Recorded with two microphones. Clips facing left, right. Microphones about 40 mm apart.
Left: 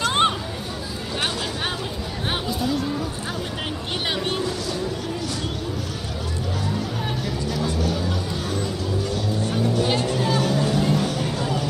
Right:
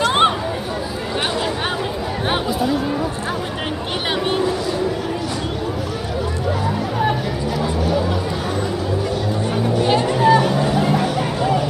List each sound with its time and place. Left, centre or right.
0.0 s chatter: centre
2.2 s chatter: centre
4.3 s a sound: centre
7.0 s music: centre
9.5 s music: centre